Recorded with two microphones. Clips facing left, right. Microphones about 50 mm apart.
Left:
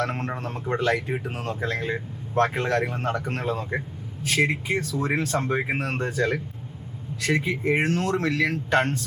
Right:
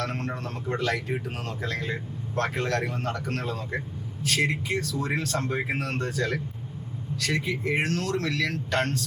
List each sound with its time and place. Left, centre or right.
0.0 s speech: centre